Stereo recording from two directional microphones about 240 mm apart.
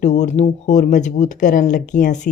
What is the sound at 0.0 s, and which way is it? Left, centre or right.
Speech, left.